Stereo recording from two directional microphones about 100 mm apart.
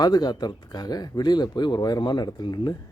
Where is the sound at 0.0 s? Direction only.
45° left (ahead or behind).